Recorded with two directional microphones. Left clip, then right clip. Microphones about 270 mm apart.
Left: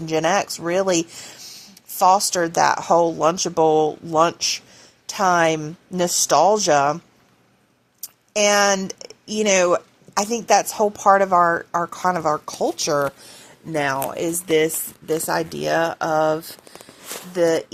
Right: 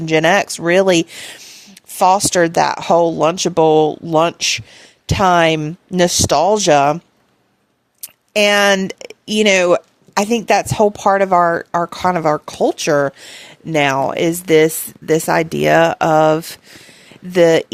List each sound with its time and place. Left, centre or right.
0.0 s speech: right
8.0 s speech: right